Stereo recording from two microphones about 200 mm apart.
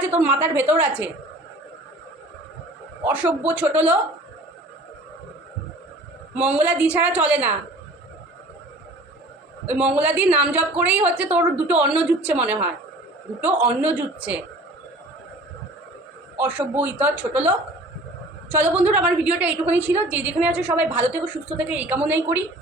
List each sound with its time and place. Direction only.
0.2 s a woman's voice: 10° right (ahead or behind)
3.1 s a woman's voice: 5° right (ahead or behind)
6.3 s a woman's voice: 5° right (ahead or behind)
9.6 s a woman's voice: 5° right (ahead or behind)
16.4 s a woman's voice: 5° right (ahead or behind)